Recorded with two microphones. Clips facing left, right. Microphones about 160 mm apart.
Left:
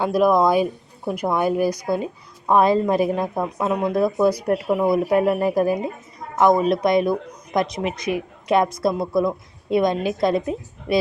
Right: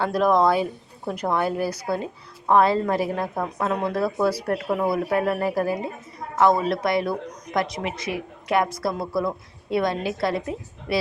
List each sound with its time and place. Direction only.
0.0 s speech: 10° left (ahead or behind)